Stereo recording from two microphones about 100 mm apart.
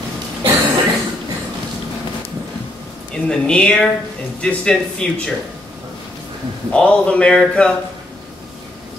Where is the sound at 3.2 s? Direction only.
10° left (ahead or behind).